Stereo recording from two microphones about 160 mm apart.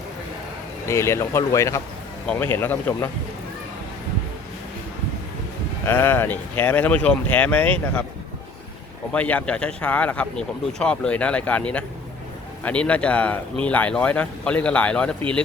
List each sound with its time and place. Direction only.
0.9 s speech: 15° left (ahead or behind)
5.8 s speech: 15° left (ahead or behind)
9.1 s speech: 10° left (ahead or behind)